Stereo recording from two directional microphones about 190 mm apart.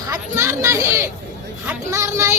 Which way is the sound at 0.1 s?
15° right (ahead or behind).